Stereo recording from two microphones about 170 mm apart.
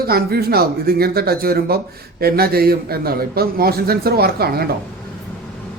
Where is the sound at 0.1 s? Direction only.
65° right (ahead or behind).